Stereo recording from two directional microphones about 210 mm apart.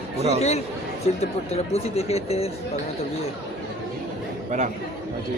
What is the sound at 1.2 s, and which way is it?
Speech, 30° left (ahead or behind).